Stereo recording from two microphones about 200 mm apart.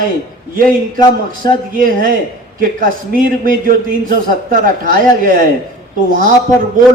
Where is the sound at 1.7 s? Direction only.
45° right (ahead or behind).